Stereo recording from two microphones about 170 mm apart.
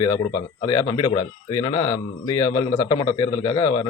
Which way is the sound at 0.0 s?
20° left (ahead or behind).